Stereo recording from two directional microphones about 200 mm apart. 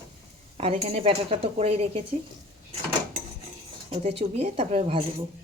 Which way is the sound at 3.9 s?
30° right (ahead or behind).